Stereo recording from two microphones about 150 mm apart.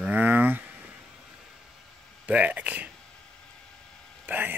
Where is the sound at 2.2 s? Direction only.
10° right (ahead or behind).